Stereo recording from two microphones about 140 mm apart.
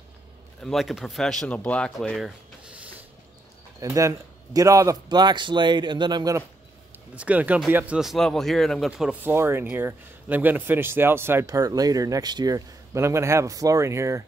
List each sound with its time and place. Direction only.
0.6 s speech: centre (ahead or behind)
3.8 s a man's voice: 25° right (ahead or behind)
7.2 s speech: 10° right (ahead or behind)
9.2 s speech: 15° right (ahead or behind)